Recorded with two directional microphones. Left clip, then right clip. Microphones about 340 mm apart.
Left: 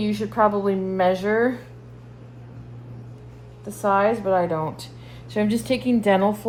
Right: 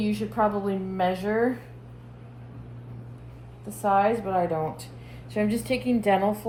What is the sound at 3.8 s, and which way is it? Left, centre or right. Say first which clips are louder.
A woman's voice: left 3 dB; left.